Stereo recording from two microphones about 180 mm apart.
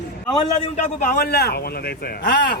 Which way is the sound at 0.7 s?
50° left (ahead or behind).